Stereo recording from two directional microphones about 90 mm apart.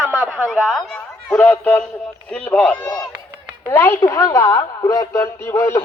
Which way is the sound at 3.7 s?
25° left (ahead or behind).